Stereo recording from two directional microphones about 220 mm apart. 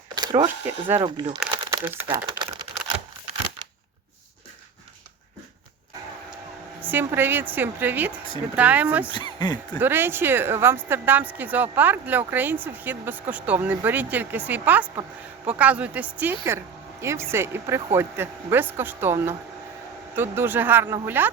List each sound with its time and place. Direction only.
0.1 s speech: 20° right (ahead or behind)
0.9 s speech: 20° right (ahead or behind)
1.6 s crumpling: 10° right (ahead or behind)
6.8 s speech: 10° right (ahead or behind)
9.1 s speech: 20° left (ahead or behind)
9.7 s speech: 10° right (ahead or behind)